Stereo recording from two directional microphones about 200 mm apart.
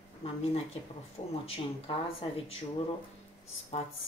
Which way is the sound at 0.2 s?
30° left (ahead or behind).